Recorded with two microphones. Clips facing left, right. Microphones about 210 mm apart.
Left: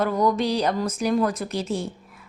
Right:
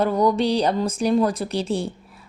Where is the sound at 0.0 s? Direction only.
30° right (ahead or behind).